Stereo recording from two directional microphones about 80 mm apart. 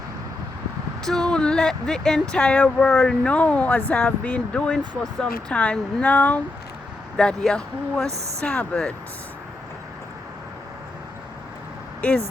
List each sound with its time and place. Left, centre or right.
1.0 s speech: centre; by 6.4 s left
7.2 s speech: centre